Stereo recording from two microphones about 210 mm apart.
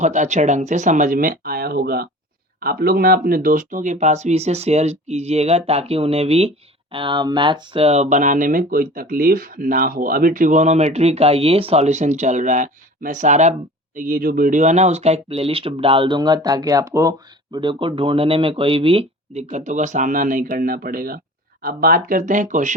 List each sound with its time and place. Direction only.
0.0 s speech: 35° right (ahead or behind)